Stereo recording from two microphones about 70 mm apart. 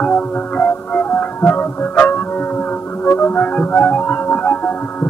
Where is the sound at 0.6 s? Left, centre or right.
Left.